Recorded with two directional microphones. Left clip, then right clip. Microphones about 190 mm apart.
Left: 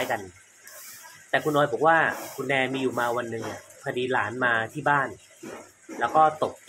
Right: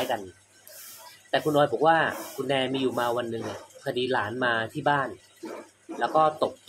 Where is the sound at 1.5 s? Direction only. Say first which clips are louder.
Even; 15° right (ahead or behind).